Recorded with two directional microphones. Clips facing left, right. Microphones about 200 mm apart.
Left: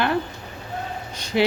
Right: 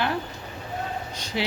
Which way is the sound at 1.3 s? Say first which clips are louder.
Left 9 dB; 60° left (ahead or behind).